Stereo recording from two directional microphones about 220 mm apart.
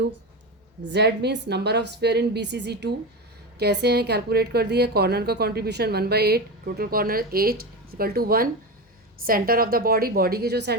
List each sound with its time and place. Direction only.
0.8 s a woman's voice: 50° right (ahead or behind)